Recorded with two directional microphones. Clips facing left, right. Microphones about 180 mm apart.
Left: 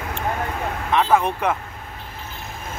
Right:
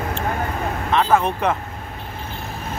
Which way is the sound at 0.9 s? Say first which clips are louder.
Even; 10° left (ahead or behind).